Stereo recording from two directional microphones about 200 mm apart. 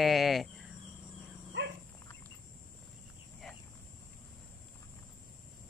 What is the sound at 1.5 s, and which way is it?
Dog, 65° right (ahead or behind).